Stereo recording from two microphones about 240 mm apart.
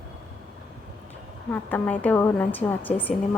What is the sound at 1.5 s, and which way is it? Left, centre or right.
A woman's voice, centre.